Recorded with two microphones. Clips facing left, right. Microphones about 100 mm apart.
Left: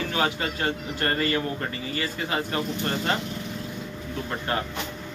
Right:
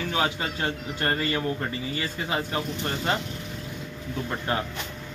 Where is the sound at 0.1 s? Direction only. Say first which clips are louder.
Right 1 dB; 20° right (ahead or behind).